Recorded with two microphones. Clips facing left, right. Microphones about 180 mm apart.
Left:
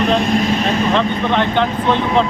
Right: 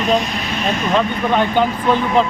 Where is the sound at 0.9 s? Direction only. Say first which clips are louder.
Even; 10° right (ahead or behind).